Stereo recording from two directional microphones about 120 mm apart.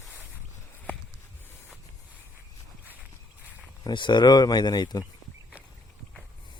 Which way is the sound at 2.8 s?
15° right (ahead or behind).